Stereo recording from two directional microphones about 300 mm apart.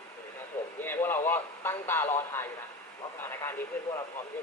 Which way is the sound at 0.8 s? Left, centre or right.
Centre.